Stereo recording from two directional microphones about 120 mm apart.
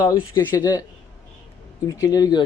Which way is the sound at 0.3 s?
35° left (ahead or behind).